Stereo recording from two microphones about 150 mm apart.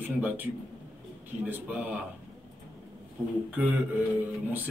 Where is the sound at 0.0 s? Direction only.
10° right (ahead or behind).